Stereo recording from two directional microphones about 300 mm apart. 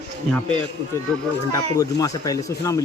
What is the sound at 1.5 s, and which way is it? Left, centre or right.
Speech, centre.